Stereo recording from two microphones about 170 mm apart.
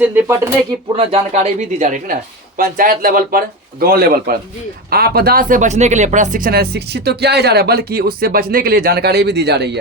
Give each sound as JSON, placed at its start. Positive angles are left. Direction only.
{"t": 0.0, "sound": "speech", "side_deg": -10}
{"t": 0.9, "sound": "speech", "side_deg": -40}